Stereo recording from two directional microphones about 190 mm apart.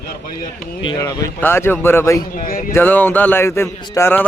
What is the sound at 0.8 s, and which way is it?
A man's voice, 20° left (ahead or behind).